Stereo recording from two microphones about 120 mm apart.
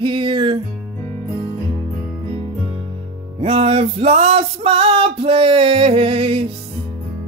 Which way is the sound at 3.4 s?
55° right (ahead or behind).